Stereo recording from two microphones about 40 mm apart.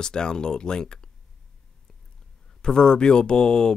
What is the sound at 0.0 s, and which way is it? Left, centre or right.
Speech, centre.